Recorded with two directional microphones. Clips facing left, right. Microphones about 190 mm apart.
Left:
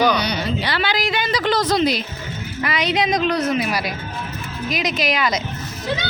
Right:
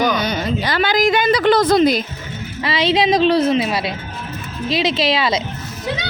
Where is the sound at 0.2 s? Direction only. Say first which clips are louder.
Right 2 dB; 45° right (ahead or behind).